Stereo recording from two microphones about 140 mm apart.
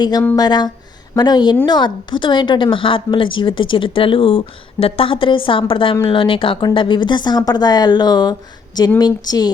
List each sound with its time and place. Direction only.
0.0 s a woman's voice: 30° left (ahead or behind)